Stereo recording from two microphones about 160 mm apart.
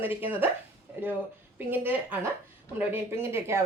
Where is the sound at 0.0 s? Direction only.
10° right (ahead or behind).